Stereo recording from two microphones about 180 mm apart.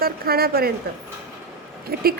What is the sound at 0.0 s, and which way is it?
Speech, 60° right (ahead or behind).